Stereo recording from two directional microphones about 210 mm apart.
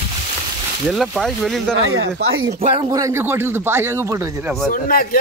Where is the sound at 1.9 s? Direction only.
65° right (ahead or behind).